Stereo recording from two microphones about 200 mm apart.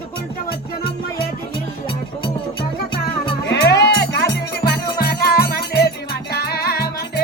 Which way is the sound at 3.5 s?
55° left (ahead or behind).